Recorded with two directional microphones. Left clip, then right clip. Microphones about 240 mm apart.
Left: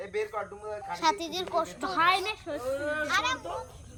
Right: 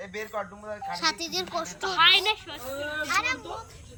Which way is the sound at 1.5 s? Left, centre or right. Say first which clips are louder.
Right 2 dB; centre.